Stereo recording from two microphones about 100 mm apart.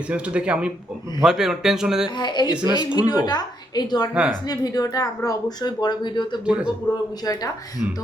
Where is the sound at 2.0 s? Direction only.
45° left (ahead or behind).